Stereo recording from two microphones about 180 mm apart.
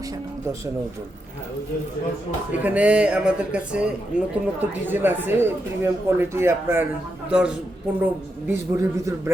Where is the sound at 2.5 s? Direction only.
10° right (ahead or behind).